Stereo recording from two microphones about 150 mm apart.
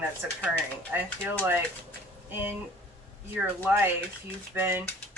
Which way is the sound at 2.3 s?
15° right (ahead or behind).